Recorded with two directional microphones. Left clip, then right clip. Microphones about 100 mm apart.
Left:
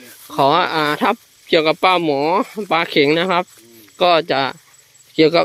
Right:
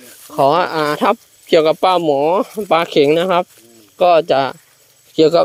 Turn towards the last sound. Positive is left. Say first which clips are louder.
# right 2 dB
turn(degrees=-20)  # may be behind; listen again after turning